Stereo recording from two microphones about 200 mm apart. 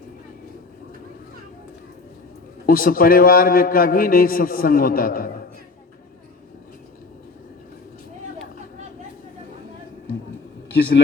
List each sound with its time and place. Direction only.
2.6 s a man's voice: 45° left (ahead or behind)